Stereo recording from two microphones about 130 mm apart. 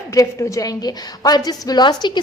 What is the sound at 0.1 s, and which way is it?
A woman's voice, 25° left (ahead or behind).